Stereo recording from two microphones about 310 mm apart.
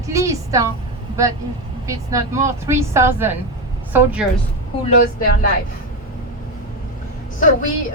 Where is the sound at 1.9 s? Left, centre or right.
Centre.